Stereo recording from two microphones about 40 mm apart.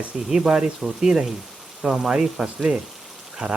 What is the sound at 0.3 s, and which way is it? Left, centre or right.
Speech, centre.